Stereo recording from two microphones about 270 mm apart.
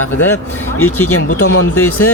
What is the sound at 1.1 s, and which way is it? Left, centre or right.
Speech, left.